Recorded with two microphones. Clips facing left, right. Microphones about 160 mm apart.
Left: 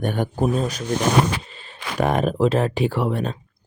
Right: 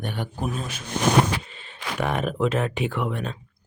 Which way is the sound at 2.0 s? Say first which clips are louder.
Left 5 dB; 40° left (ahead or behind).